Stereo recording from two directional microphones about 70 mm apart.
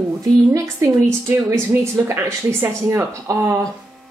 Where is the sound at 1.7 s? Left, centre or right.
Right.